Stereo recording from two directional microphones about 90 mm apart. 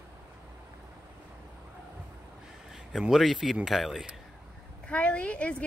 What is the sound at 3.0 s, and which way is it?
Speech, 5° right (ahead or behind).